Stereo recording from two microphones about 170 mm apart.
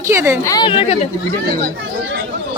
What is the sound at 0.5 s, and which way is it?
Speech, 30° left (ahead or behind).